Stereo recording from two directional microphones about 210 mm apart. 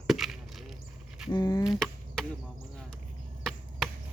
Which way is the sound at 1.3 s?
20° left (ahead or behind).